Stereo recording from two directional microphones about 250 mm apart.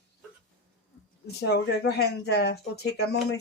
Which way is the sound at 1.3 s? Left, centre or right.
Left.